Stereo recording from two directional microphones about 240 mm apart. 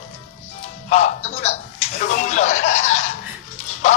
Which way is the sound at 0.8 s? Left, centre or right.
Left.